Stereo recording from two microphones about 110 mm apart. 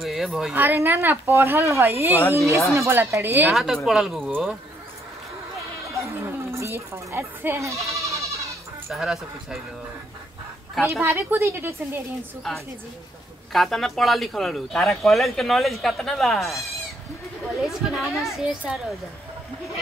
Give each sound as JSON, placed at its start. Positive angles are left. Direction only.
{"t": 0.0, "sound": "speech", "side_deg": -5}
{"t": 0.6, "sound": "speech", "side_deg": -20}
{"t": 3.4, "sound": "speech", "side_deg": 0}
{"t": 5.9, "sound": "speech", "side_deg": -25}
{"t": 7.9, "sound": "goat", "side_deg": -30}
{"t": 8.9, "sound": "speech", "side_deg": -5}
{"t": 10.9, "sound": "speech", "side_deg": -25}
{"t": 13.5, "sound": "speech", "side_deg": 0}